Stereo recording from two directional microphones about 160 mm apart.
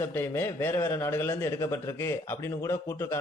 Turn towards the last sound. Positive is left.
turn(degrees=20)  # may be behind; listen again after turning